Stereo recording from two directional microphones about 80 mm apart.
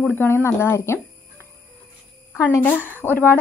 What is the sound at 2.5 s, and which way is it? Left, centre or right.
Speech, left.